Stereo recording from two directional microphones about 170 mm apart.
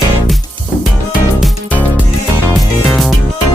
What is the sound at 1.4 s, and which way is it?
Music, 5° left (ahead or behind).